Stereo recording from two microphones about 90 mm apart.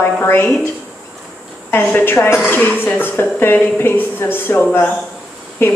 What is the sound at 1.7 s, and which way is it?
A woman's voice, 25° left (ahead or behind).